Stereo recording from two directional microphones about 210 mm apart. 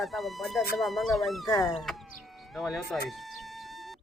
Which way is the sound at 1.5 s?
20° left (ahead or behind).